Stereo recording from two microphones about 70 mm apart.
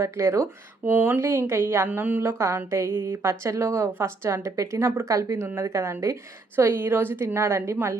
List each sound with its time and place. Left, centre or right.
0.0 s a woman's voice: right
0.9 s a woman's voice: right
1.9 s a woman's voice: right
2.6 s a woman's voice: right
6.6 s a woman's voice: right
7.3 s a woman's voice: right